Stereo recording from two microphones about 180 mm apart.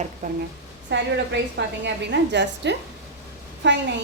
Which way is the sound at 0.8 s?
75° right (ahead or behind).